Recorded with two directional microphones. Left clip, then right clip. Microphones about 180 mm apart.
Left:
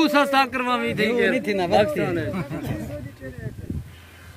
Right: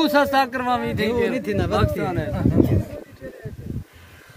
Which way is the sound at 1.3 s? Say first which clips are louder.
Left 3 dB; 5° right (ahead or behind).